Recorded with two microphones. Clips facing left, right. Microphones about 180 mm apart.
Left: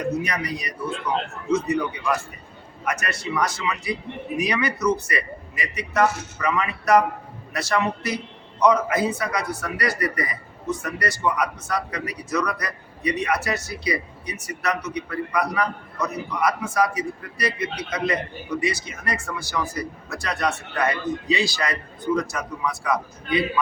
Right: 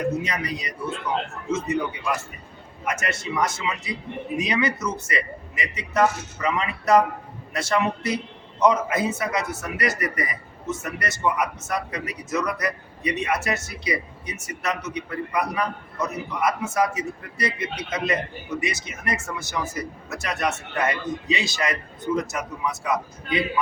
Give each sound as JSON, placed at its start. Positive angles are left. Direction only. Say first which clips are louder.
{"t": 0.2, "sound": "a man's voice", "louder": "left 1 dB", "side_deg": -25}
{"t": 2.8, "sound": "a man's voice", "louder": "even", "side_deg": -25}